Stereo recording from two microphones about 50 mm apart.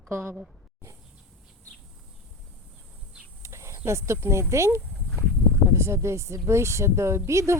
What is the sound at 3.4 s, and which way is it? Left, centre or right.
Speech, right.